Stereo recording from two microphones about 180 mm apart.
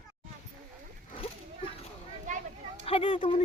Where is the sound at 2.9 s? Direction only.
30° left (ahead or behind).